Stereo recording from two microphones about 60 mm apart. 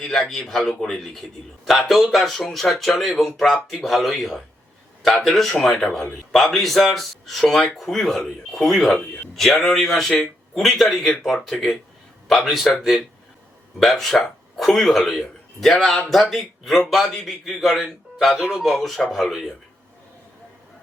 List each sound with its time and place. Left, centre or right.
0.0 s a man's voice: centre